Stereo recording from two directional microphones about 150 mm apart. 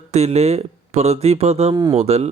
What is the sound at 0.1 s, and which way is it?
Speech, 45° right (ahead or behind).